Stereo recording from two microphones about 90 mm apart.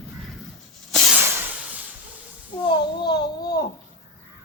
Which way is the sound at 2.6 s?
55° left (ahead or behind).